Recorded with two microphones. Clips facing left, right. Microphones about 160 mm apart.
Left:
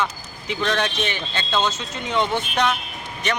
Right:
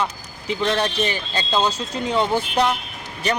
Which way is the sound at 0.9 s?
35° right (ahead or behind).